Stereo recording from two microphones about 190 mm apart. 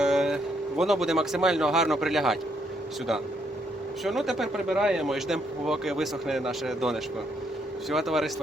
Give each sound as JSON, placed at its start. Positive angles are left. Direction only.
{"t": 0.0, "sound": "a sound", "side_deg": 0}
{"t": 0.8, "sound": "speech", "side_deg": 0}
{"t": 4.0, "sound": "speech", "side_deg": 0}